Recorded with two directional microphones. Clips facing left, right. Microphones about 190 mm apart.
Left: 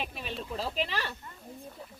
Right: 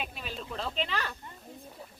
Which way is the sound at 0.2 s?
Centre (ahead or behind).